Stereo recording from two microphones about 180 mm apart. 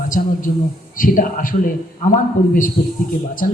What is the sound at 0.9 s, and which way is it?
Speech, 50° left (ahead or behind).